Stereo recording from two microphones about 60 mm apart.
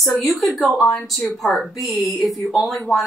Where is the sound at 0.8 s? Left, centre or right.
Centre.